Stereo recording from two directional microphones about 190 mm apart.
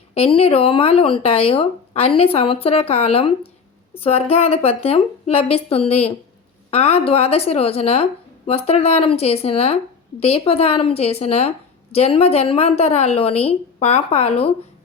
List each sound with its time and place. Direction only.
0.1 s speech: 30° left (ahead or behind)